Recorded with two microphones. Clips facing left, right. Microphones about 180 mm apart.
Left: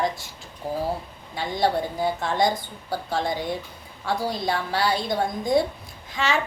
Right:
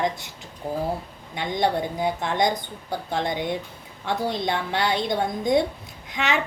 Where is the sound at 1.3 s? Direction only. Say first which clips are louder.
Even; 20° right (ahead or behind).